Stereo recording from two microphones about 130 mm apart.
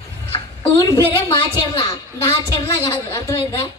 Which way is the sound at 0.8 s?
35° left (ahead or behind).